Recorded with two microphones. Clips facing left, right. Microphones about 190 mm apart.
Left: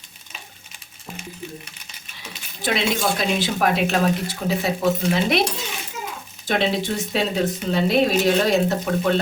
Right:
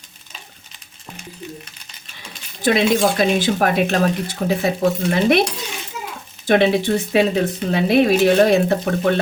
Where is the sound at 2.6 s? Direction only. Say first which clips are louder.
Right 7 dB; 50° right (ahead or behind).